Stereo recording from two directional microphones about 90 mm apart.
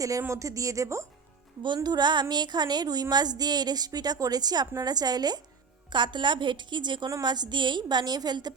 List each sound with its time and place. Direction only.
0.2 s speech: 35° right (ahead or behind)
1.6 s a woman's voice: 55° right (ahead or behind)
5.9 s a woman's voice: 60° right (ahead or behind)